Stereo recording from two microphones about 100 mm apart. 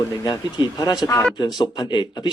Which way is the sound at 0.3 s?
45° left (ahead or behind).